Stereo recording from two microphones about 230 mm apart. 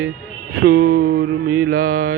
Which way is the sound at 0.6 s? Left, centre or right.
Right.